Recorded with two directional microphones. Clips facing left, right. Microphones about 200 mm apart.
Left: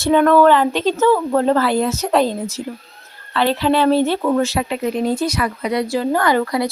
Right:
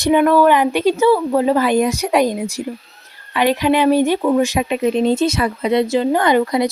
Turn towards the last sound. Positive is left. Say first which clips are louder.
# right 2 dB
turn(degrees=-20)  # may be behind; listen again after turning